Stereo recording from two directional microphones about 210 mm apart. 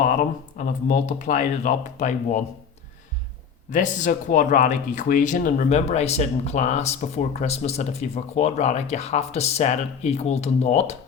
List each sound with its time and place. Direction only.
0.5 s speech: 35° left (ahead or behind)
3.7 s speech: 35° left (ahead or behind)